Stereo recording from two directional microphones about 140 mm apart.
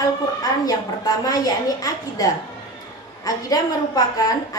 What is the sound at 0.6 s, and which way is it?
A woman's voice, 25° left (ahead or behind).